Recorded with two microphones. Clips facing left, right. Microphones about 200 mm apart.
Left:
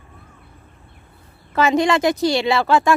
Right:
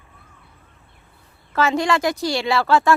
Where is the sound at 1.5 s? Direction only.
15° left (ahead or behind).